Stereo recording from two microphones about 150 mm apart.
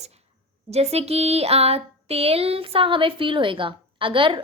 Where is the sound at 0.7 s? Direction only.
45° right (ahead or behind).